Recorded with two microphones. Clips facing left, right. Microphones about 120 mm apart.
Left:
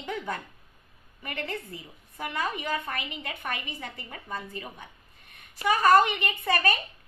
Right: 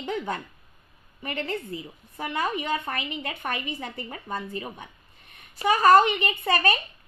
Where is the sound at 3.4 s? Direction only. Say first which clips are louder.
Right 3 dB; 45° right (ahead or behind).